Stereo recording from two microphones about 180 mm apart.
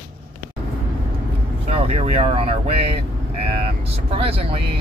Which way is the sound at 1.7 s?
35° right (ahead or behind).